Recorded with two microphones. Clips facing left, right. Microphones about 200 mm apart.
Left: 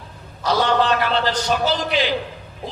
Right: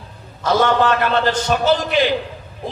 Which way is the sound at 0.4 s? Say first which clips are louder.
Right 3 dB; 50° right (ahead or behind).